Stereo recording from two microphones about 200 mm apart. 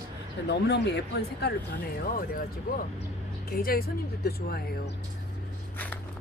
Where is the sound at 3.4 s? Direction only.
50° left (ahead or behind).